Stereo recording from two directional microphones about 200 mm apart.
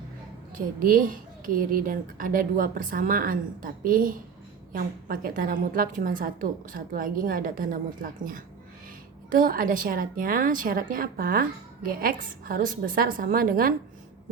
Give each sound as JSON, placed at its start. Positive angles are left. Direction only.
{"t": 0.5, "sound": "a woman's voice", "side_deg": -45}